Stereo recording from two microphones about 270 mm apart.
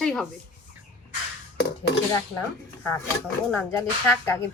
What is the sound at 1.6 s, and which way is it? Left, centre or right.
Speech, left.